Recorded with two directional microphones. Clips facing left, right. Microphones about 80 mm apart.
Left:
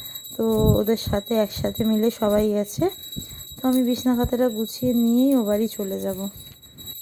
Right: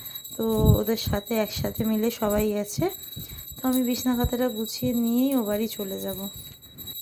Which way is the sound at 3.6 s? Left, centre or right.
Left.